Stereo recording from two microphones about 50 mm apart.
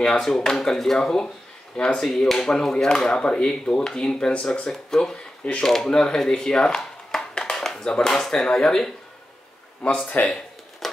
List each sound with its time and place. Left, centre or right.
0.0 s speech: centre
7.4 s a sound: centre
7.9 s speech: centre
10.0 s speech: left